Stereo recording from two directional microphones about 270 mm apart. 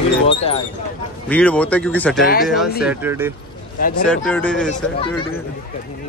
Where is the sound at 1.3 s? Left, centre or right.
Centre.